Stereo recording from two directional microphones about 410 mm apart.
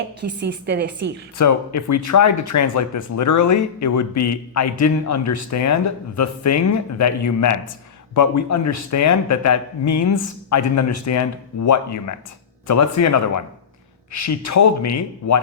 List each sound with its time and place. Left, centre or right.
0.2 s a woman's voice: right
1.4 s a man's voice: left